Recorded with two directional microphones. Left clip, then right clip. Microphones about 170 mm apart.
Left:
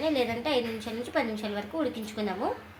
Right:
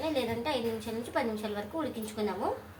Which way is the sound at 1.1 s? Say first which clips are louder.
Left 2 dB; 55° left (ahead or behind).